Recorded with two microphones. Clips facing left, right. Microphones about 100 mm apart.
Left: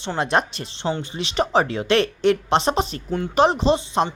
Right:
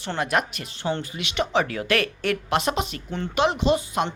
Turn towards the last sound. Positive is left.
turn(degrees=30)  # may be behind; listen again after turning